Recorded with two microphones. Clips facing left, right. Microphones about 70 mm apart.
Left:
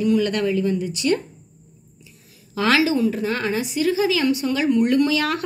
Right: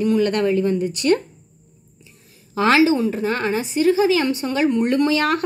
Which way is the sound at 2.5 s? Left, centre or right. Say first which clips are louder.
Right 3 dB; right.